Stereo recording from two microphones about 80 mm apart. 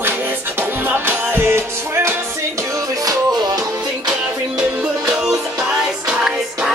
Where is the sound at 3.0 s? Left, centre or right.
Right.